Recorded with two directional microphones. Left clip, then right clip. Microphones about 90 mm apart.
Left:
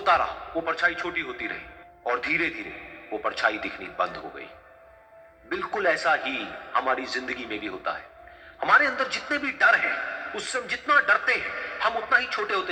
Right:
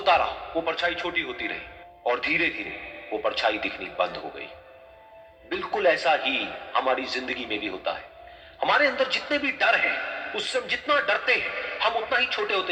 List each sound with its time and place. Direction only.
0.0 s a man's voice: 35° right (ahead or behind)
5.5 s a man's voice: 35° right (ahead or behind)